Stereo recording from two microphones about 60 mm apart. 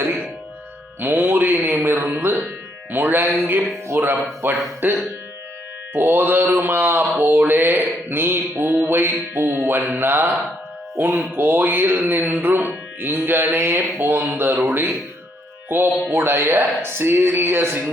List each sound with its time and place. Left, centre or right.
0.9 s music: right
3.9 s speech: right
4.4 s music: right
10.9 s speech: right
11.3 s music: right